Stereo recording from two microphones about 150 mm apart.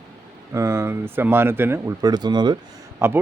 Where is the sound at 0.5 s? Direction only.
20° right (ahead or behind).